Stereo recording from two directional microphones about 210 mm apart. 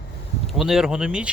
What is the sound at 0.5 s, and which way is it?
Speech, centre (ahead or behind).